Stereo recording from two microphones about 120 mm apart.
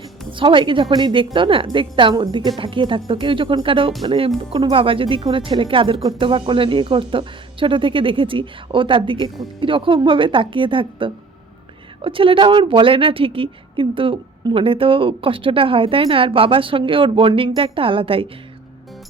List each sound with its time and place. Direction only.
0.3 s a woman's voice: 45° right (ahead or behind)